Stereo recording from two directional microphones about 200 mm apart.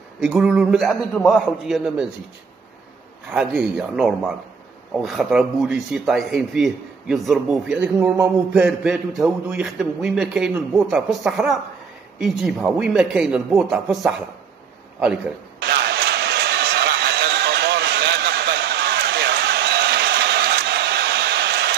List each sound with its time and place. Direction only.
0.2 s speech: 5° right (ahead or behind)
3.3 s speech: 5° right (ahead or behind)
15.6 s a sound: 55° right (ahead or behind)